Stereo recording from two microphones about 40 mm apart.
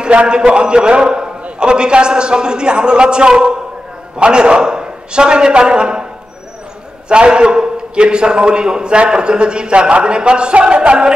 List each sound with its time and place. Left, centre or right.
0.0 s a man's voice: right
7.1 s a man's voice: right